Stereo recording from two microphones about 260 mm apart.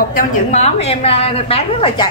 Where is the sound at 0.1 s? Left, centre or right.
Left.